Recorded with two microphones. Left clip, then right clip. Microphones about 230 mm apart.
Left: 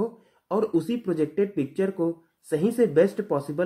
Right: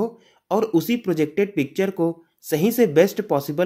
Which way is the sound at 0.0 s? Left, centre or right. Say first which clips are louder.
Right 4 dB; right.